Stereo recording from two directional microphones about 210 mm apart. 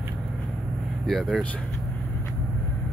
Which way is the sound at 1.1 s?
Centre (ahead or behind).